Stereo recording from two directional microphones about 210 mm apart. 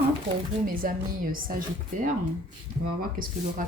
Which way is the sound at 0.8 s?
40° right (ahead or behind).